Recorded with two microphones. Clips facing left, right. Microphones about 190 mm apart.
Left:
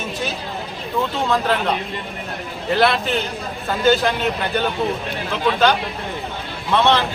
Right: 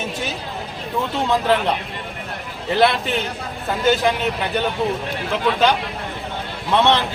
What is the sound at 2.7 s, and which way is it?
Speech, 20° right (ahead or behind).